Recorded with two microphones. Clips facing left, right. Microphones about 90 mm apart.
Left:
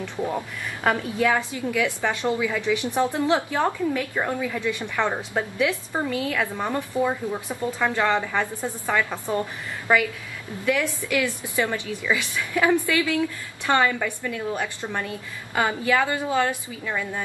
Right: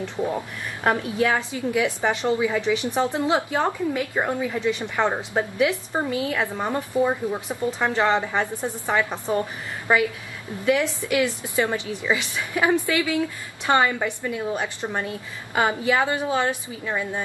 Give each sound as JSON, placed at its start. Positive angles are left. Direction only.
{"t": 0.8, "sound": "a woman's voice", "side_deg": -20}